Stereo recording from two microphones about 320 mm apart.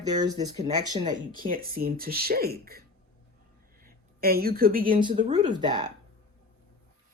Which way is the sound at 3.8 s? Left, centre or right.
Right.